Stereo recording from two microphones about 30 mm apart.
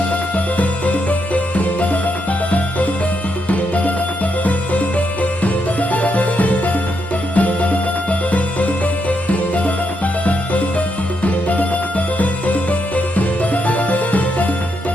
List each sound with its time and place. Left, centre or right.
0.3 s music: left
4.4 s music: left